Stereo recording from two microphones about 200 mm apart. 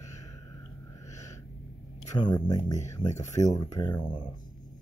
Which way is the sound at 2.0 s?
20° left (ahead or behind).